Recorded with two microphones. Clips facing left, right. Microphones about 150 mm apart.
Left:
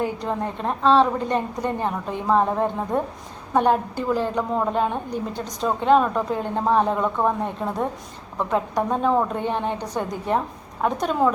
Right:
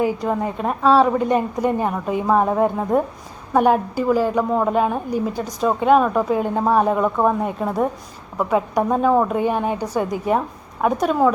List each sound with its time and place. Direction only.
0.0 s a woman's voice: 5° right (ahead or behind)